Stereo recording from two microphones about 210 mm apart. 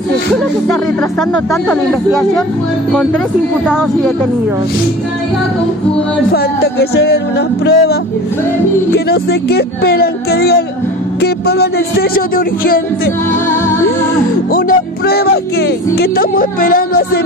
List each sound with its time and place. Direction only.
1.5 s speech: centre (ahead or behind)
3.6 s speech: 5° left (ahead or behind)
6.3 s speech: 50° left (ahead or behind)
13.5 s music: 10° left (ahead or behind)
14.5 s music: 45° left (ahead or behind)
16.0 s speech: 45° left (ahead or behind)